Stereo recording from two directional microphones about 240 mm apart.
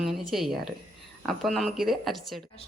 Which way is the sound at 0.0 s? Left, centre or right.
Centre.